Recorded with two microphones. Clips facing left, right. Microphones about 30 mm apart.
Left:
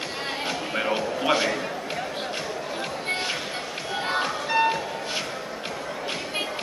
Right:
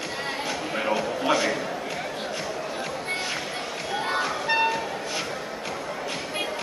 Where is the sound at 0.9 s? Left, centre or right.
Left.